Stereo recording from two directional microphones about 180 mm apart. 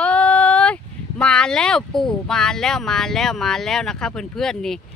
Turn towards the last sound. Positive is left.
turn(degrees=5)  # may be behind; listen again after turning